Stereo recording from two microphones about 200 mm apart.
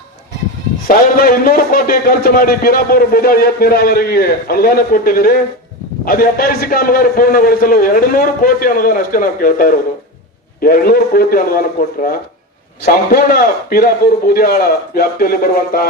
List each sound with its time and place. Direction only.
0.9 s a man's voice: 45° left (ahead or behind)